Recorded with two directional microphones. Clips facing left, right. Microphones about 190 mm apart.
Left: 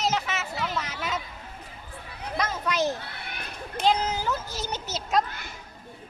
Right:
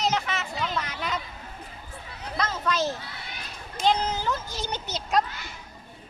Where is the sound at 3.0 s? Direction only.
60° left (ahead or behind).